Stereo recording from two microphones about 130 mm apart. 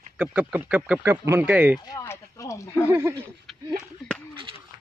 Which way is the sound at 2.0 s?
20° left (ahead or behind).